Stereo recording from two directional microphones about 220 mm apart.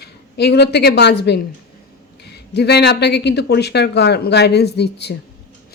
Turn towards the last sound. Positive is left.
turn(degrees=50)  # may be behind; listen again after turning